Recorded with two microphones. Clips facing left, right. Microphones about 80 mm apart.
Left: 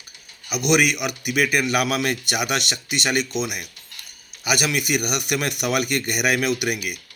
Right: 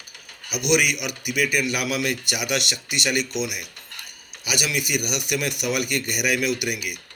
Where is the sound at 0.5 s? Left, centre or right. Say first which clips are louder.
Left 2 dB; left.